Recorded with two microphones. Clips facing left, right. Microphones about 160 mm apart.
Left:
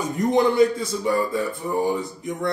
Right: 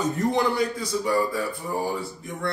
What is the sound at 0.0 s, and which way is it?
Speech, 20° left (ahead or behind).